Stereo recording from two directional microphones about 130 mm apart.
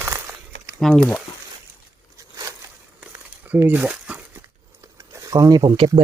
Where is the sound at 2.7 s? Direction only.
10° right (ahead or behind); by 5.8 s 30° right (ahead or behind).